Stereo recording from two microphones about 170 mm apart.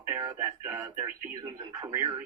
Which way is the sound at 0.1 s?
20° right (ahead or behind).